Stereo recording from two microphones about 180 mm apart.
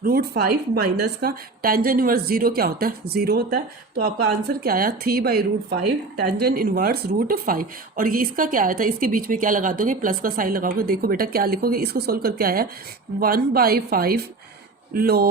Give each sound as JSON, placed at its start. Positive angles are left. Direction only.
{"t": 0.0, "sound": "a woman's voice", "side_deg": -60}